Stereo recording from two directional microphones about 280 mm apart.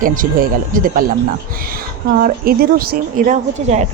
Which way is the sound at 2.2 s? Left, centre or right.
Right.